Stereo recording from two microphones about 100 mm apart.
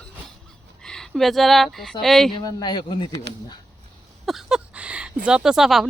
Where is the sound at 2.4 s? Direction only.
45° left (ahead or behind).